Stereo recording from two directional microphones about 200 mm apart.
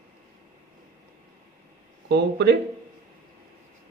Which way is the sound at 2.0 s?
55° right (ahead or behind).